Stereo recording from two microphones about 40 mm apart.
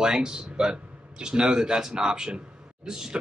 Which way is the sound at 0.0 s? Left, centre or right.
Centre.